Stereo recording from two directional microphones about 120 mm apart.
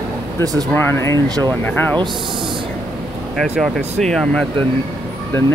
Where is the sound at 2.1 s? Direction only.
Centre (ahead or behind).